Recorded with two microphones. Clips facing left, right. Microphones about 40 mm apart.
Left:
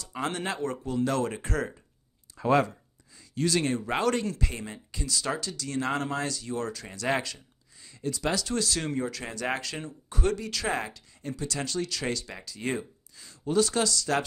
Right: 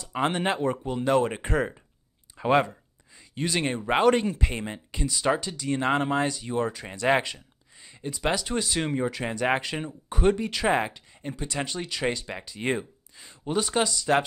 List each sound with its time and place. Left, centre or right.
0.1 s speech: right